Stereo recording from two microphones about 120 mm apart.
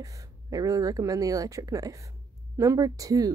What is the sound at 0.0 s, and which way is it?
Speech, 30° right (ahead or behind).